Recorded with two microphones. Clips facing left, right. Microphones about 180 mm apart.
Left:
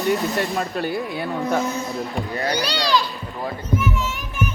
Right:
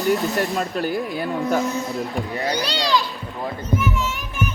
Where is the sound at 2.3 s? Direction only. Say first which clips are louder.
Even; 20° right (ahead or behind).